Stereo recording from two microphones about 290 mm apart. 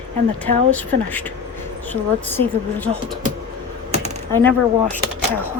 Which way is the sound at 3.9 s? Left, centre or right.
Centre.